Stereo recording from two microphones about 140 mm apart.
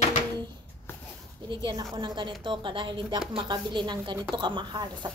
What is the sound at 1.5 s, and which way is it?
Speech, 35° right (ahead or behind).